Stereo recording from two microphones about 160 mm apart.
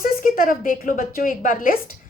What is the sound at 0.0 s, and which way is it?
A woman's voice, 60° left (ahead or behind).